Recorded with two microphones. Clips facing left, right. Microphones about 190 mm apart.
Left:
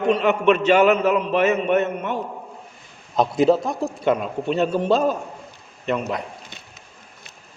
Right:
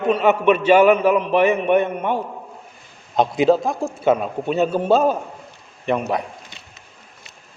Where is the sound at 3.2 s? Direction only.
Centre (ahead or behind).